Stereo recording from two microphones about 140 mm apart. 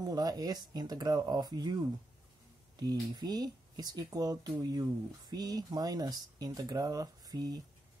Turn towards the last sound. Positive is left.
turn(degrees=-25)  # may be behind; listen again after turning